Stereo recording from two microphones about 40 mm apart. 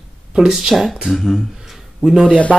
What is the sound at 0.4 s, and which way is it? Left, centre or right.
Speech, centre.